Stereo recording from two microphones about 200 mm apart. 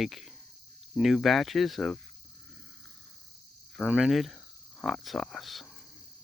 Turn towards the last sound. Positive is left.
turn(degrees=0)  # may be behind; listen again after turning